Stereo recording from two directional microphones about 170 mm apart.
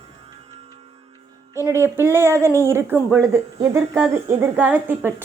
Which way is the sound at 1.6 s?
15° right (ahead or behind).